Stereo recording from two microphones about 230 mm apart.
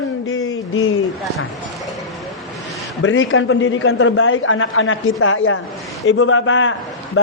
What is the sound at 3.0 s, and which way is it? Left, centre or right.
A man's voice, left.